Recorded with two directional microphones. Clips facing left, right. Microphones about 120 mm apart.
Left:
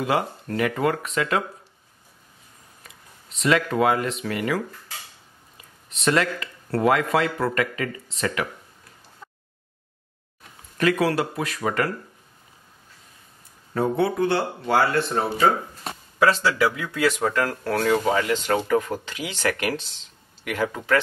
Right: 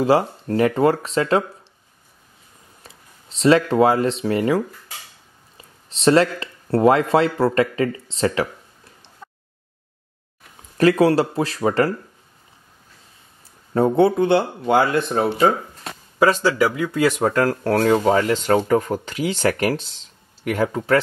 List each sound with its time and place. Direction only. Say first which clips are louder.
0.0 s speech: right 7 dB; 30° right (ahead or behind)
2.8 s speech: right 2 dB; 30° right (ahead or behind)
5.9 s speech: right 6 dB; 30° right (ahead or behind)
10.8 s speech: right 6 dB; 30° right (ahead or behind)
13.7 s speech: right 6 dB; 25° right (ahead or behind)
16.7 s speech: right 4 dB; 35° right (ahead or behind)